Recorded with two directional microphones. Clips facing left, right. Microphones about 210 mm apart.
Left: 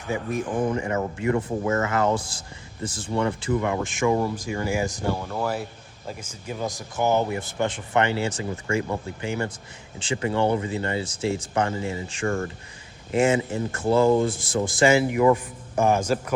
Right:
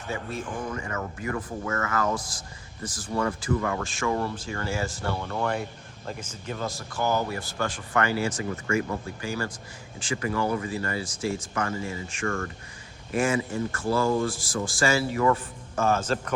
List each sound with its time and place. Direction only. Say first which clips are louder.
0.1 s speech: left 6 dB; 15° left (ahead or behind)